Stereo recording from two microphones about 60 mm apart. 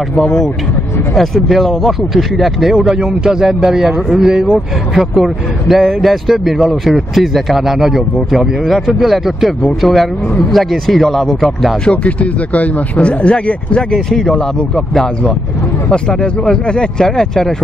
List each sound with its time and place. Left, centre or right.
1.1 s speech: centre
11.8 s speech: centre
13.9 s speech: centre
15.9 s speech: centre